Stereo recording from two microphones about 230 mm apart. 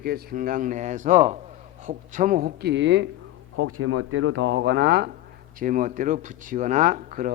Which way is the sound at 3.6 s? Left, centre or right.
Right.